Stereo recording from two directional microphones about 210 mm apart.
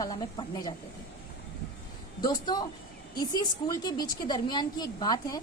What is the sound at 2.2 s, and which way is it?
A woman's voice, 20° left (ahead or behind).